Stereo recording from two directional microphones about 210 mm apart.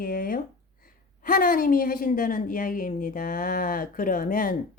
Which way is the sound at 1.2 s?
40° left (ahead or behind).